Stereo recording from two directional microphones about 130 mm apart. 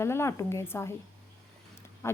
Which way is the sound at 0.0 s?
20° left (ahead or behind).